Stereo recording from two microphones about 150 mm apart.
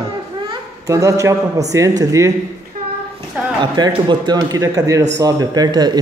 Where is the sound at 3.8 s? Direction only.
30° right (ahead or behind).